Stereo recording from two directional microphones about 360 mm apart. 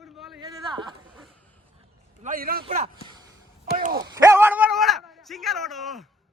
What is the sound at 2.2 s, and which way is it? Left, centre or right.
A man's voice, right.